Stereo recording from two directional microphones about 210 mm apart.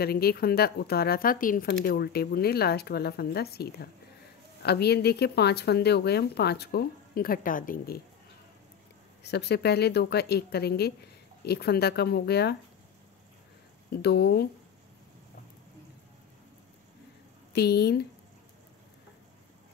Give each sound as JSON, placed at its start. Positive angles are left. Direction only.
{"t": 0.0, "sound": "speech", "side_deg": 50}
{"t": 9.2, "sound": "speech", "side_deg": 50}
{"t": 13.9, "sound": "speech", "side_deg": 50}
{"t": 17.5, "sound": "speech", "side_deg": 50}